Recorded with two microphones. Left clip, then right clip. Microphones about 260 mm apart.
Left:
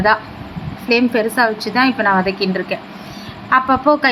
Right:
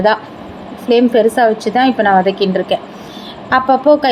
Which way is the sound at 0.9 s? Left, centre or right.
Centre.